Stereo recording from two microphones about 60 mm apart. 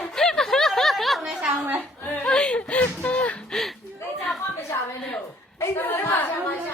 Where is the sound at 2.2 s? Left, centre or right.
Centre.